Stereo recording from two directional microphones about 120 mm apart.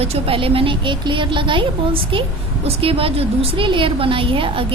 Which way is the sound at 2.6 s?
50° right (ahead or behind).